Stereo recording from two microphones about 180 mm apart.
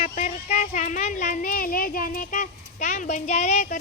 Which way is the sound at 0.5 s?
45° left (ahead or behind).